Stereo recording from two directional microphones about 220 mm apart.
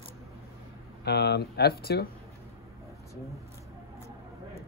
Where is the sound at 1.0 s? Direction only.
50° left (ahead or behind).